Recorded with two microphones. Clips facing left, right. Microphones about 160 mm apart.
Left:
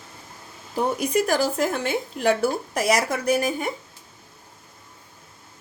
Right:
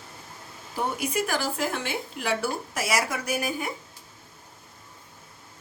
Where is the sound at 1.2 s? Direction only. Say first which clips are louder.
Left 6 dB; 40° left (ahead or behind).